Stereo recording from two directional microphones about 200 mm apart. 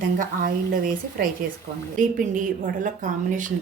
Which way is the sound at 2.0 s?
40° right (ahead or behind).